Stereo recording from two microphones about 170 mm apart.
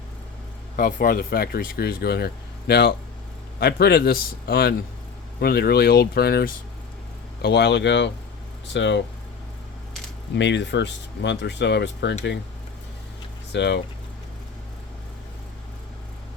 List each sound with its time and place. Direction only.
0.8 s speech: 55° left (ahead or behind)
7.4 s speech: 80° left
10.3 s speech: 90° left
13.5 s speech: 90° left